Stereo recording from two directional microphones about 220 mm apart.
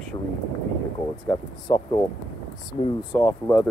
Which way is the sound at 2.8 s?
20° left (ahead or behind).